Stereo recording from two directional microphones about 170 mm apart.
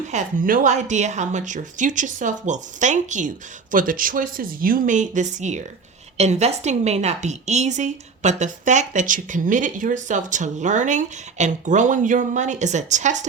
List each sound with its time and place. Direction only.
0.1 s a woman's voice: 50° right (ahead or behind)